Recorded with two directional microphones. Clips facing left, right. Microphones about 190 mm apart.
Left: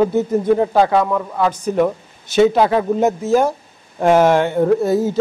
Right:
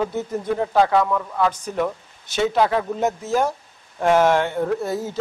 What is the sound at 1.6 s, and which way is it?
Speech, 10° left (ahead or behind).